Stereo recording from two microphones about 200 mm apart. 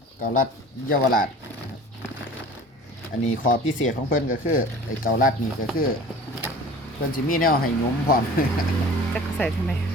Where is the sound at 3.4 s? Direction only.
75° left (ahead or behind).